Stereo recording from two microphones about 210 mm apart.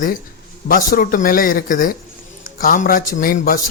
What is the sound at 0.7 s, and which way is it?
Speech, 45° left (ahead or behind).